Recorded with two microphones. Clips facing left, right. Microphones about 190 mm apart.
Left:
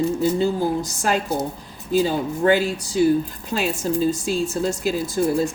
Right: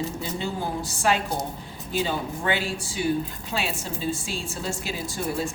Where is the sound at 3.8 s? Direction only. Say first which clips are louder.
Left 9 dB; 45° left (ahead or behind).